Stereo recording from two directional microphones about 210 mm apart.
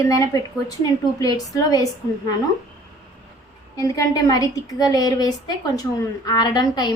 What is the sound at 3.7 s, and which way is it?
A woman's voice, 15° left (ahead or behind).